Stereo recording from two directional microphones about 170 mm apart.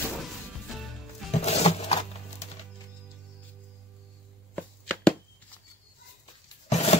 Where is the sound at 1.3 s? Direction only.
40° left (ahead or behind).